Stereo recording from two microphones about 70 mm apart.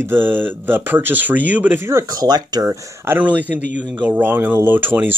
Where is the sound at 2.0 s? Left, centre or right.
Right.